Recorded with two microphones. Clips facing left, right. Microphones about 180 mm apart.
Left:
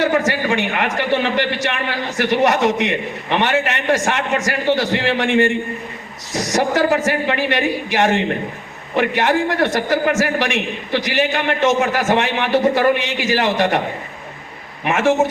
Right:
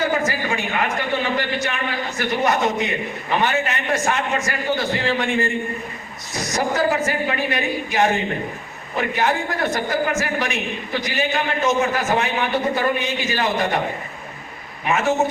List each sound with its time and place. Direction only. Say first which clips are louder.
0.2 s a man's voice: left 4 dB; 85° left
14.8 s a man's voice: left 4 dB; 90° left